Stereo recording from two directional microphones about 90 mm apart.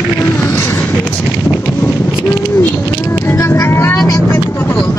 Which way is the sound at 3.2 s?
25° left (ahead or behind).